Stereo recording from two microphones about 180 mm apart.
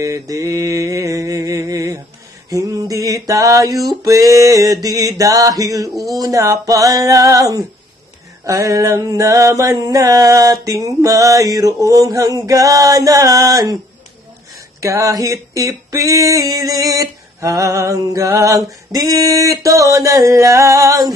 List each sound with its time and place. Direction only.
0.0 s mantra: 20° right (ahead or behind)
2.5 s a sound: 20° right (ahead or behind)
14.8 s female singing: 15° right (ahead or behind)